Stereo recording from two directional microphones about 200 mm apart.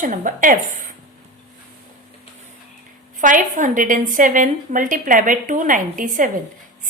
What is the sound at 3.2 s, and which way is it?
A woman's voice, 40° right (ahead or behind).